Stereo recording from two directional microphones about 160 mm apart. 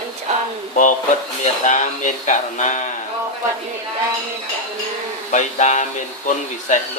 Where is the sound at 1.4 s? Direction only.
50° left (ahead or behind).